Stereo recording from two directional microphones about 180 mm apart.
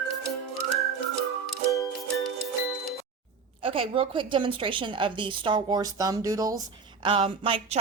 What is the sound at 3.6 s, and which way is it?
A woman's voice, 30° right (ahead or behind).